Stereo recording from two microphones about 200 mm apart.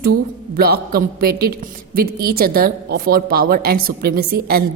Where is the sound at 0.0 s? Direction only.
50° right (ahead or behind).